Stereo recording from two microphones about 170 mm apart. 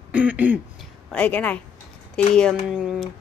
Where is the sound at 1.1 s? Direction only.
10° left (ahead or behind).